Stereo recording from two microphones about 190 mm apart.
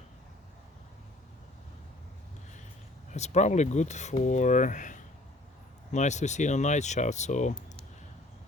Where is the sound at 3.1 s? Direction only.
35° left (ahead or behind).